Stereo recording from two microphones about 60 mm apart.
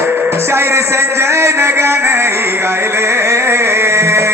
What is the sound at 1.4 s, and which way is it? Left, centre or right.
Music, right.